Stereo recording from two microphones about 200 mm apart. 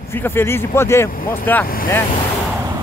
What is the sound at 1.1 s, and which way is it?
Speech, 45° left (ahead or behind).